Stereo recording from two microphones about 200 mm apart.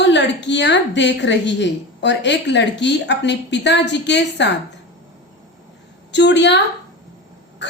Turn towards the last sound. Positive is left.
turn(degrees=60)  # may be behind; listen again after turning